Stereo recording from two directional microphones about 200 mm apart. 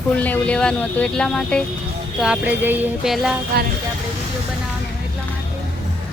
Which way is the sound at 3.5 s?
50° right (ahead or behind).